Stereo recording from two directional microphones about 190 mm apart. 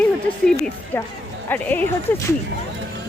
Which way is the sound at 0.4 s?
5° left (ahead or behind).